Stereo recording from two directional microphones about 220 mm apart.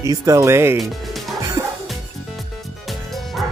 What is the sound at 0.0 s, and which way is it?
Speech, 15° right (ahead or behind).